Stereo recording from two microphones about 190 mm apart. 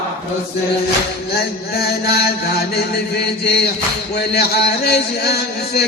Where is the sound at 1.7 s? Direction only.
55° left (ahead or behind).